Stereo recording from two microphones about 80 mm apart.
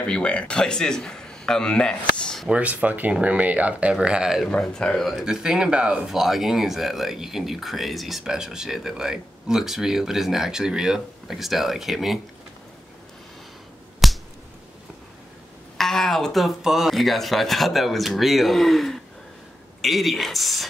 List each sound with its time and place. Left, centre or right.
0.0 s a man's voice: centre
2.4 s speech: centre
4.5 s a man's voice: centre
5.2 s speech: centre
14.0 s finger snapping: centre
15.8 s speech: centre